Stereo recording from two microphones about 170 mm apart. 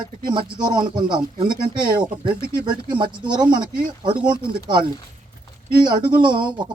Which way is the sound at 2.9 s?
25° right (ahead or behind).